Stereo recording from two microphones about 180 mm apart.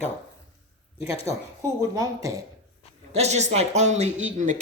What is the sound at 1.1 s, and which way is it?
Speech, 35° left (ahead or behind).